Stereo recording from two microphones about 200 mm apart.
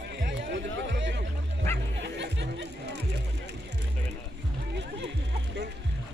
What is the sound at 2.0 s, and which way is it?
Music, 60° right (ahead or behind).